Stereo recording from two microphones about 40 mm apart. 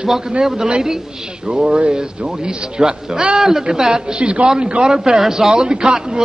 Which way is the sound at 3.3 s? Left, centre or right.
Centre.